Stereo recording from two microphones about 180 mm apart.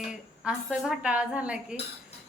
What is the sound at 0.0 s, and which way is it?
A woman's voice, 5° right (ahead or behind).